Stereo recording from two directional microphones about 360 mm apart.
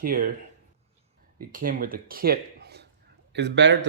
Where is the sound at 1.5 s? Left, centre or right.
Right.